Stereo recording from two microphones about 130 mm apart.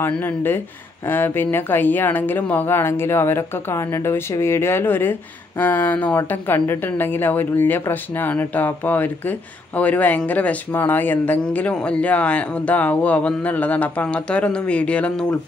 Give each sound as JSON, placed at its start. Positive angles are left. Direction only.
{"t": 0.0, "sound": "speech", "side_deg": 15}